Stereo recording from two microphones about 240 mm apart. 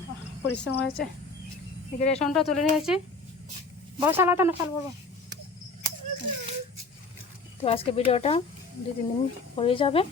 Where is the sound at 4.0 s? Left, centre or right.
Centre.